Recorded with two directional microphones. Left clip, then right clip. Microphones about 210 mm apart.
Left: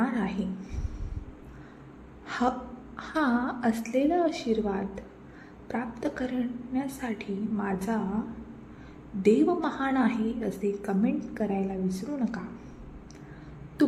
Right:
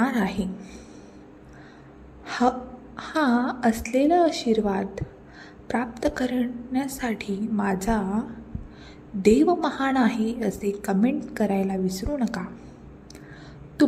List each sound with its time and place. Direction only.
0.0 s a woman's voice: 20° right (ahead or behind)
2.2 s a woman's voice: 15° right (ahead or behind)
9.2 s a woman's voice: 20° right (ahead or behind)